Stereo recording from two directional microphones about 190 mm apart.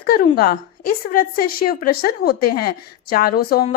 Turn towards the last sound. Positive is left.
turn(degrees=50)  # may be behind; listen again after turning